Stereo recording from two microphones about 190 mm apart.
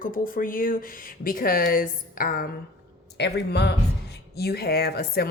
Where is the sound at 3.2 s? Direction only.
65° left (ahead or behind).